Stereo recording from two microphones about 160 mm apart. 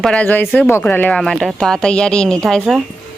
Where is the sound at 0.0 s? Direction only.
5° left (ahead or behind).